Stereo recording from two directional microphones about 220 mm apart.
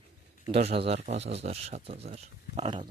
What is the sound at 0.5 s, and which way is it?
Speech, 25° right (ahead or behind).